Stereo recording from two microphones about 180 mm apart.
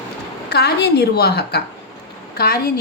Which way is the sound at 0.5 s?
65° left (ahead or behind).